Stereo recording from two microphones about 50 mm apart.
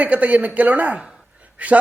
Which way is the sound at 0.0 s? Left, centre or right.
Right.